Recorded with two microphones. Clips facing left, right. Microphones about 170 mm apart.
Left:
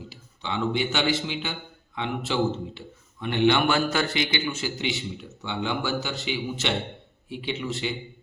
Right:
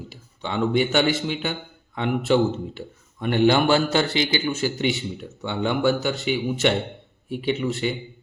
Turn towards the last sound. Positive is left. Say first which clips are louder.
# right 6 dB
turn(degrees=-50)  # may be behind; listen again after turning